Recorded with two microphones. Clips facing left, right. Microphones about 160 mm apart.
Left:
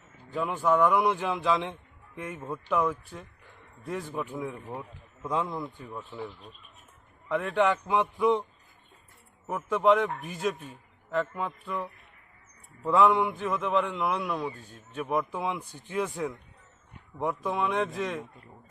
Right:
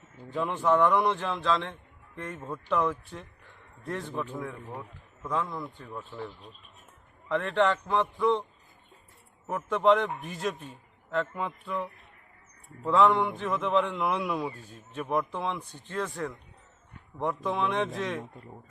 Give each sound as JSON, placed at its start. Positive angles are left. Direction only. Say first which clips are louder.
{"t": 0.3, "sound": "a man's voice", "louder": "even", "side_deg": 0}
{"t": 4.2, "sound": "a man's voice", "louder": "left 1 dB", "side_deg": 15}
{"t": 5.8, "sound": "a man's voice", "louder": "left 1 dB", "side_deg": 5}
{"t": 9.5, "sound": "a man's voice", "louder": "even", "side_deg": 5}